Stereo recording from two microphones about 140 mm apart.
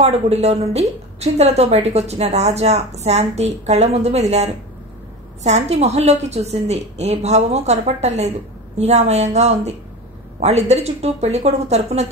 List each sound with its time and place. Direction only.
0.0 s a woman's voice: 50° right (ahead or behind)